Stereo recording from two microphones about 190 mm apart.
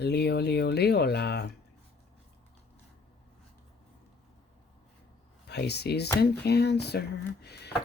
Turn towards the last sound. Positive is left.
turn(degrees=60)  # may be behind; listen again after turning